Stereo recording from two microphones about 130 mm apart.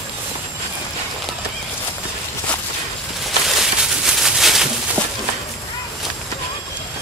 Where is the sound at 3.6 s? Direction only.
5° right (ahead or behind).